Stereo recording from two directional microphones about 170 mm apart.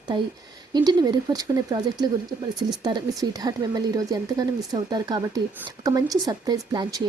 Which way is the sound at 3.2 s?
20° right (ahead or behind).